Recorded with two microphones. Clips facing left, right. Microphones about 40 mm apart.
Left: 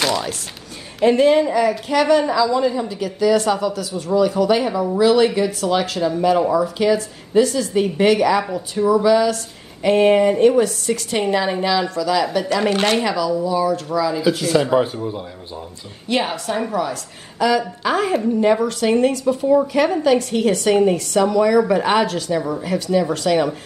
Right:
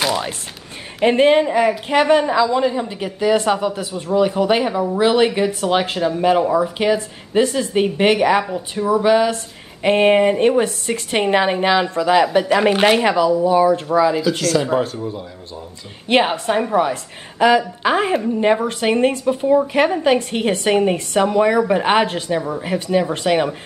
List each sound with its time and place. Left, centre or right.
1.0 s a woman's voice: right
8.5 s a woman's voice: centre
9.0 s a woman's voice: right
14.7 s speech: centre
16.3 s a woman's voice: right